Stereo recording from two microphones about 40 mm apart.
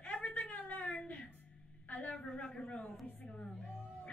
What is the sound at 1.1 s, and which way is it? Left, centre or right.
Music, left.